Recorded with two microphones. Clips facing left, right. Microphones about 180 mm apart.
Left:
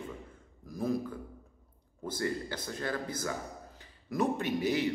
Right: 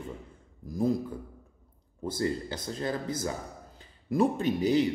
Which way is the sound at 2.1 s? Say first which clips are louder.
Right 3 dB; 25° right (ahead or behind).